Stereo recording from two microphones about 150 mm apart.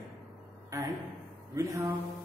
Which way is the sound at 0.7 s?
20° right (ahead or behind).